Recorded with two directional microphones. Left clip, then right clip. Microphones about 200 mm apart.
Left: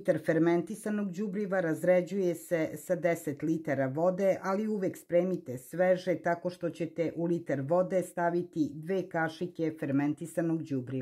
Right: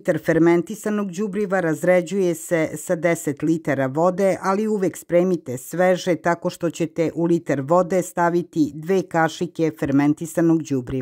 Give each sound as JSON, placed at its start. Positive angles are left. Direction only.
{"t": 0.0, "sound": "speech", "side_deg": -30}